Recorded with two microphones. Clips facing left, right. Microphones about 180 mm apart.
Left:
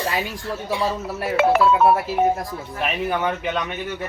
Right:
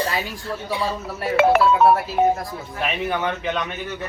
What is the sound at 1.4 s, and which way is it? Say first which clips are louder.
Speech: right 2 dB; 60° right (ahead or behind).